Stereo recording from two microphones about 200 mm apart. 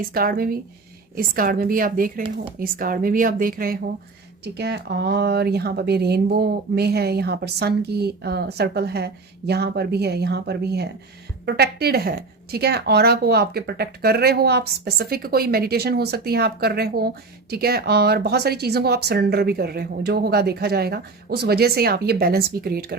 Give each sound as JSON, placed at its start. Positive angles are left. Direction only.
{"t": 0.1, "sound": "speech", "side_deg": -45}